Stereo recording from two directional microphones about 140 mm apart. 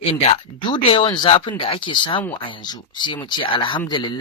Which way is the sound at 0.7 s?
35° left (ahead or behind).